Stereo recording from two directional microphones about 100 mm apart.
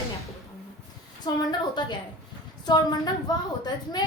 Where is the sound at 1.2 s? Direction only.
45° left (ahead or behind).